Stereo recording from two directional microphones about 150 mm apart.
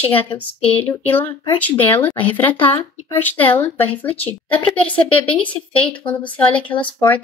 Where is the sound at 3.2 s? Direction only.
10° left (ahead or behind).